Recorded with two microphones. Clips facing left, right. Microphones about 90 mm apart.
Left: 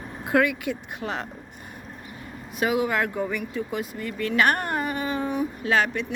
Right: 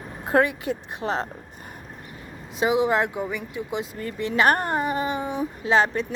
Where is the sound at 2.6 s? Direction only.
25° right (ahead or behind).